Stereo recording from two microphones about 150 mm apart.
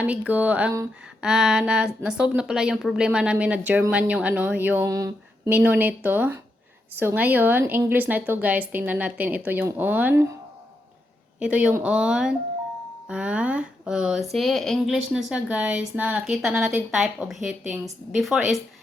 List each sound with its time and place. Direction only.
0.0 s a woman's voice: 10° right (ahead or behind)
4.9 s a sound: 25° right (ahead or behind)
5.5 s a woman's voice: 10° right (ahead or behind)
11.3 s a woman's voice: 5° right (ahead or behind)